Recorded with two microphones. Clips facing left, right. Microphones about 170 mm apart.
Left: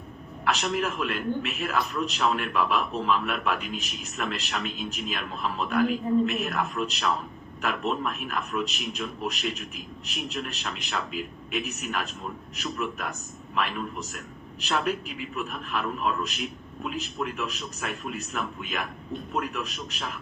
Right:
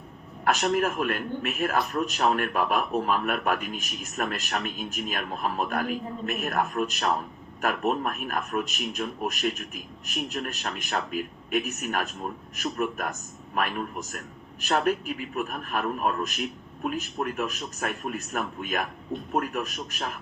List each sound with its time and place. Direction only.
0.4 s a man's voice: 50° right (ahead or behind)